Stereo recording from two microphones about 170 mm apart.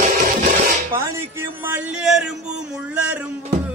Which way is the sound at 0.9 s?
15° right (ahead or behind).